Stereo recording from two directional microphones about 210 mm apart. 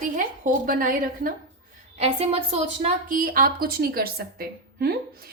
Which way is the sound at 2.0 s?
30° right (ahead or behind).